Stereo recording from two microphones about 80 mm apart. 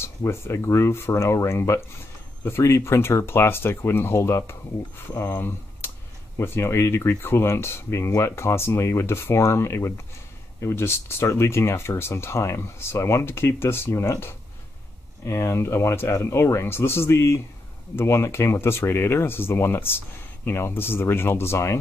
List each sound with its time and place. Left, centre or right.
0.0 s speech: left